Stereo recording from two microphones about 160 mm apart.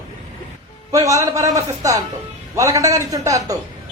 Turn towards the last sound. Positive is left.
turn(degrees=-20)  # may be behind; listen again after turning